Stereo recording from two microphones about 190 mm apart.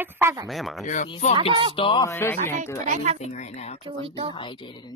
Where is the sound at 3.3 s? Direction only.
35° left (ahead or behind).